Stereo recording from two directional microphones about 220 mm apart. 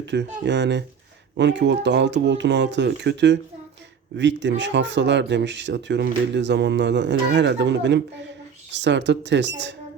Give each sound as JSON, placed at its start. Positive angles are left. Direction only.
{"t": 0.0, "sound": "speech", "side_deg": -55}